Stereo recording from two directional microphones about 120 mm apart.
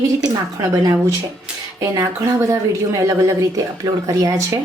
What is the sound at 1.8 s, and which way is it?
A woman's voice, 25° right (ahead or behind).